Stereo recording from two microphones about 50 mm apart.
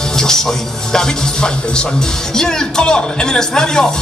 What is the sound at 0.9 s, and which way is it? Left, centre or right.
Music, centre.